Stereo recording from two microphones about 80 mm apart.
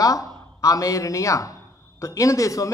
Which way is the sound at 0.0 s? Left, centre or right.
Left.